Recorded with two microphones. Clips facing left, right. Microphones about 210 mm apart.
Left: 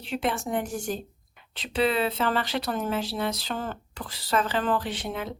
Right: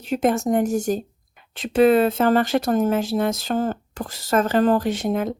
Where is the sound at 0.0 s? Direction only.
45° right (ahead or behind).